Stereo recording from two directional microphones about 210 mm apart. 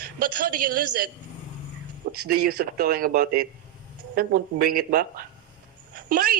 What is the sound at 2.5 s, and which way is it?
Speech, 45° right (ahead or behind).